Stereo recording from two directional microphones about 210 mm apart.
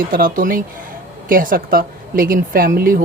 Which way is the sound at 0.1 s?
40° right (ahead or behind).